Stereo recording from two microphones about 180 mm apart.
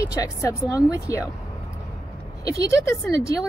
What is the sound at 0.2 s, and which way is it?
A woman's voice, 20° left (ahead or behind).